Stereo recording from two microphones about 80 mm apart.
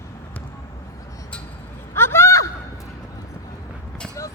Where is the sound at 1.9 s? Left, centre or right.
Left.